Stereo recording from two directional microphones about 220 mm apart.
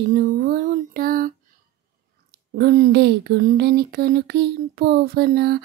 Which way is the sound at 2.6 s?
45° right (ahead or behind).